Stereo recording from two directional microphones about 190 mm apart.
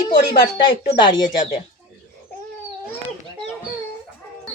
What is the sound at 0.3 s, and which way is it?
Speech, 25° left (ahead or behind).